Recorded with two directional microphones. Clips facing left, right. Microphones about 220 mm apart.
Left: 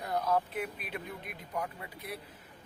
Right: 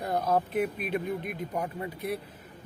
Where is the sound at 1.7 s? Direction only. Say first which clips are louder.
Right 11 dB; 40° right (ahead or behind).